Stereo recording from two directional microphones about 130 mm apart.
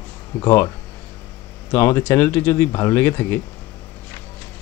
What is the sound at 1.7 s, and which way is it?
Speech, 15° left (ahead or behind).